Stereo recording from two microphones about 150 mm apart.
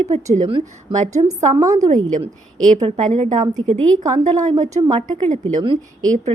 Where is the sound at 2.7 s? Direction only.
45° right (ahead or behind).